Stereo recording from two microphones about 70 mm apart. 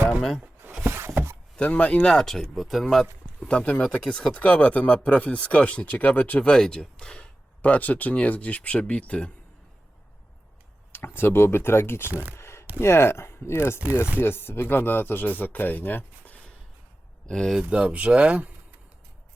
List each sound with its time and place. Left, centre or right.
0.2 s speech: centre
0.6 s a sound: right
1.5 s speech: centre
10.9 s speech: left
12.4 s a sound: left
12.8 s speech: left
17.2 s speech: centre
17.6 s speech: centre